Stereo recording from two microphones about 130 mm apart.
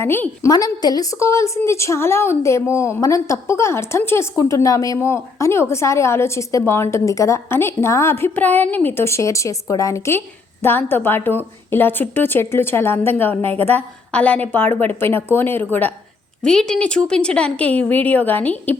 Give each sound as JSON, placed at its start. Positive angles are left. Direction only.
{"t": 0.0, "sound": "a woman's voice", "side_deg": 15}
{"t": 0.5, "sound": "a woman's voice", "side_deg": 30}
{"t": 16.4, "sound": "a woman's voice", "side_deg": 5}